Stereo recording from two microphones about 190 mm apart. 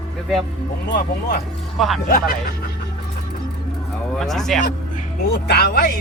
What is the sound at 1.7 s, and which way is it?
Speech, centre (ahead or behind).